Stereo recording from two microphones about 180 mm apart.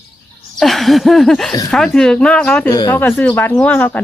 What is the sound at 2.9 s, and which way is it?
Speech, 10° left (ahead or behind).